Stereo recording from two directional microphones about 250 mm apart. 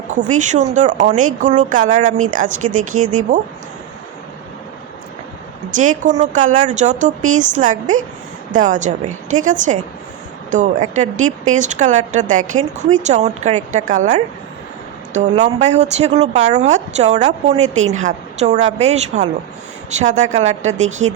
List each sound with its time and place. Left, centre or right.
0.1 s a woman's voice: right
5.7 s a woman's voice: right